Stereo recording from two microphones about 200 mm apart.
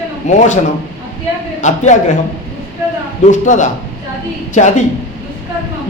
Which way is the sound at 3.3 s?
40° left (ahead or behind).